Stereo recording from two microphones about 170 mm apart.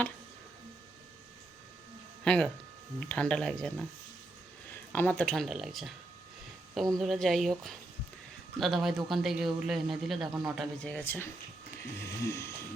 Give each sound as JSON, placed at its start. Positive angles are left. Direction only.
{"t": 2.2, "sound": "a man's voice", "side_deg": 5}
{"t": 6.9, "sound": "a man's voice", "side_deg": 0}